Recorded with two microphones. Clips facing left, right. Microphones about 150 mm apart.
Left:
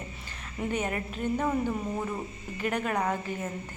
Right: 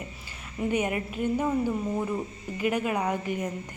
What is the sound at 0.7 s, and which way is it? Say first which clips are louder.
A woman's voice: right 4 dB; 10° right (ahead or behind).